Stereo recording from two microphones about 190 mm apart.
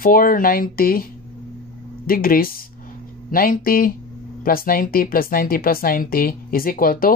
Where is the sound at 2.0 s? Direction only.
50° left (ahead or behind).